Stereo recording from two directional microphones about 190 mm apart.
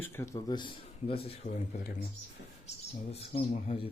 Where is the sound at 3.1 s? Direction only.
30° left (ahead or behind).